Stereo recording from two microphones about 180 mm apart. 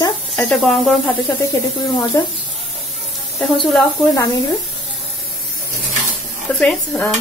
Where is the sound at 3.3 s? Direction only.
Centre (ahead or behind).